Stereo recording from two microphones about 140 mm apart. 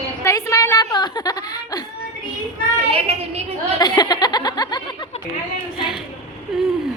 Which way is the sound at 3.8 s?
30° left (ahead or behind).